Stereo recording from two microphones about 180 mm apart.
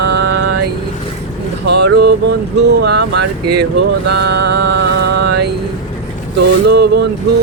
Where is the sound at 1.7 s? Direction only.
65° right (ahead or behind).